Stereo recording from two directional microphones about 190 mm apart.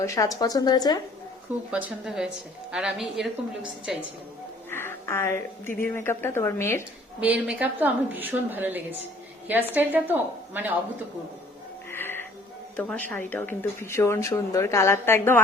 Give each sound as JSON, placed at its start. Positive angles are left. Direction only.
{"t": 0.0, "sound": "speech", "side_deg": 15}
{"t": 1.7, "sound": "a woman's voice", "side_deg": -5}
{"t": 4.7, "sound": "speech", "side_deg": 10}
{"t": 7.2, "sound": "a woman's voice", "side_deg": -5}
{"t": 11.9, "sound": "music", "side_deg": 10}
{"t": 12.7, "sound": "speech", "side_deg": 10}